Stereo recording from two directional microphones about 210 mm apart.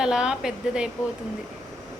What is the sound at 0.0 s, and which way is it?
Speech, 5° right (ahead or behind).